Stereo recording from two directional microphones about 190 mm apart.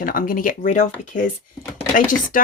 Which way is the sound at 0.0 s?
50° left (ahead or behind).